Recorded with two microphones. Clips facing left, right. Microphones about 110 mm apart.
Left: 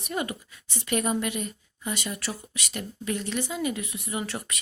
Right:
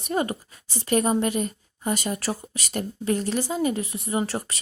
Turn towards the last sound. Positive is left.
turn(degrees=-35)  # may be behind; listen again after turning